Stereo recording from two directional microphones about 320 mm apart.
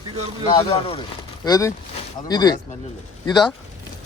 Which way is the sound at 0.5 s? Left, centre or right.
Centre.